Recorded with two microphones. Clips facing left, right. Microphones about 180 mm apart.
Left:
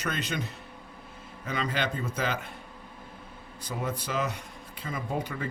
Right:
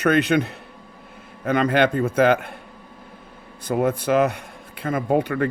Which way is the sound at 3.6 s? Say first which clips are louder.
Right 13 dB; 60° right (ahead or behind).